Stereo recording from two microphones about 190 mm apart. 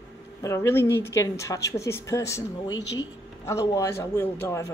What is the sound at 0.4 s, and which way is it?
A woman's voice, 15° left (ahead or behind).